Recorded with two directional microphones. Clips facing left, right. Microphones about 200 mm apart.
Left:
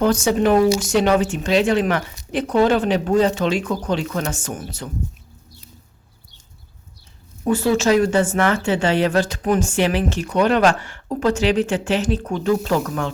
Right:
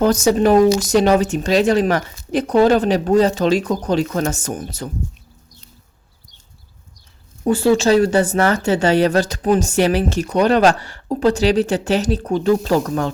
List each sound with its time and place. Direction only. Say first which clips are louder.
0.0 s a woman's voice: right 3 dB; 40° right (ahead or behind)
7.4 s a woman's voice: right 3 dB; 30° right (ahead or behind)